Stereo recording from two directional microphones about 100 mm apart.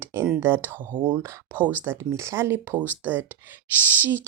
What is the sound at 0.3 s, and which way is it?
A woman's voice, 25° right (ahead or behind).